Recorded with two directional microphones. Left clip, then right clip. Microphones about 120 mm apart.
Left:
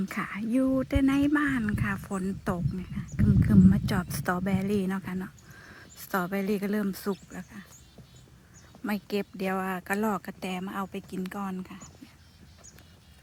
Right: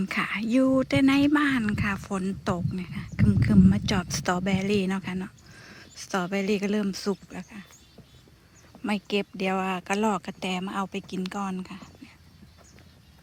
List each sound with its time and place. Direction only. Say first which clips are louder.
0.0 s speech: right 6 dB; 20° right (ahead or behind)
2.7 s speech: right 2 dB; 25° right (ahead or behind)
3.4 s speech: right 1 dB; 15° right (ahead or behind)
7.3 s speech: right 3 dB; 20° right (ahead or behind)
8.8 s speech: right 4 dB; 15° right (ahead or behind)